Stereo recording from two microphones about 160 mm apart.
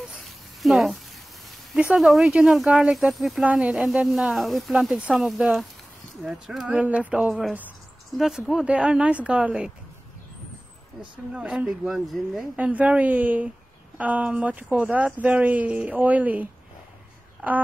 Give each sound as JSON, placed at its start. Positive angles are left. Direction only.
{"t": 0.1, "sound": "a sound", "side_deg": 0}
{"t": 1.7, "sound": "speech", "side_deg": -5}
{"t": 11.3, "sound": "speech", "side_deg": -5}